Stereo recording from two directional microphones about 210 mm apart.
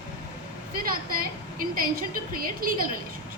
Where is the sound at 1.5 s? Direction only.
45° right (ahead or behind).